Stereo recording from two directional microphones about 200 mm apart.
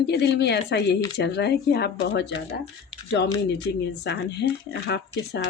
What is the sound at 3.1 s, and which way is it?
Speech, 60° left (ahead or behind).